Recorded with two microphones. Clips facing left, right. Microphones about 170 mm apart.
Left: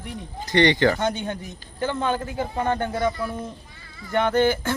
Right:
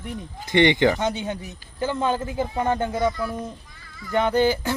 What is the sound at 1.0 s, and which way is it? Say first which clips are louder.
Speech: even; 5° right (ahead or behind).